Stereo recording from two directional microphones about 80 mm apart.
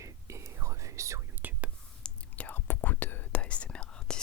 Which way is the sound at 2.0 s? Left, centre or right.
Centre.